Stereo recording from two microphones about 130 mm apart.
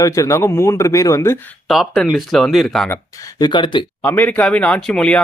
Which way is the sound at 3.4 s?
35° left (ahead or behind).